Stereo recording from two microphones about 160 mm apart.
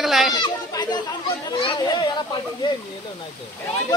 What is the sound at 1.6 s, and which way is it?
Speech, 25° left (ahead or behind).